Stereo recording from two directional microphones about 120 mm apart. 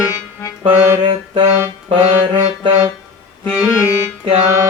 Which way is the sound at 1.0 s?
50° right (ahead or behind).